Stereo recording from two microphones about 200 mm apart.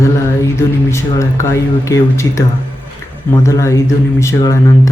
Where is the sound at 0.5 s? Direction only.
15° left (ahead or behind).